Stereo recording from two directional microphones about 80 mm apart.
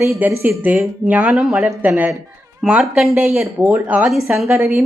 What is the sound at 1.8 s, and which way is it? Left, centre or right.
Speech, centre.